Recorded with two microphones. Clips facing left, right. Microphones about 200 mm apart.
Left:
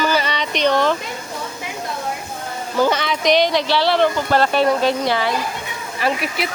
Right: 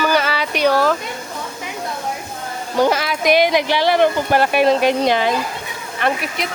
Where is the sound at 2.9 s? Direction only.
5° right (ahead or behind).